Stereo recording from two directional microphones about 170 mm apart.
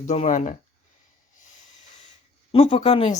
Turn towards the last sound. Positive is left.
turn(degrees=35)  # may be behind; listen again after turning